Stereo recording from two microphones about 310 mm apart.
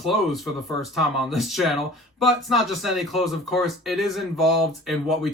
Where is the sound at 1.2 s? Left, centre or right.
Centre.